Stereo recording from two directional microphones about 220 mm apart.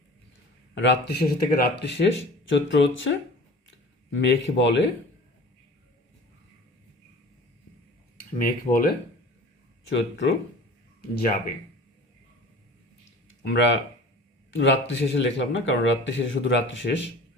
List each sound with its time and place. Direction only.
0.8 s speech: 50° left (ahead or behind)
4.1 s speech: 55° left (ahead or behind)
8.4 s speech: 40° left (ahead or behind)
11.1 s speech: 40° left (ahead or behind)
13.4 s speech: 55° left (ahead or behind)